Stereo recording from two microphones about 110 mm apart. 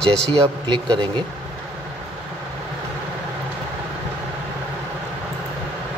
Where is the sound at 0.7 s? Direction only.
45° right (ahead or behind).